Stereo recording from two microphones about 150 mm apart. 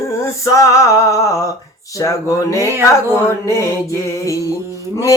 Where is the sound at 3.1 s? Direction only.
20° left (ahead or behind).